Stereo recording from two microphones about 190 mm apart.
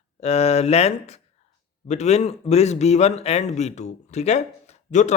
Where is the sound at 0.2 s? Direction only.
35° left (ahead or behind).